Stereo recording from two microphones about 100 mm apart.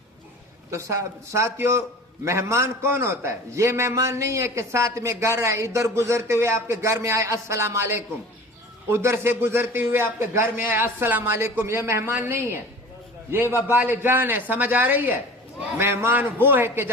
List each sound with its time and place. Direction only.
0.7 s a man's voice: 30° right (ahead or behind)